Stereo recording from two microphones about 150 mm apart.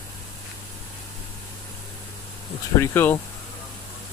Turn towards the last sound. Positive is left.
turn(degrees=15)  # may be behind; listen again after turning